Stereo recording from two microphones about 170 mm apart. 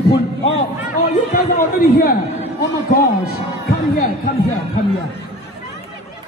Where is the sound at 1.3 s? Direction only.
65° left (ahead or behind).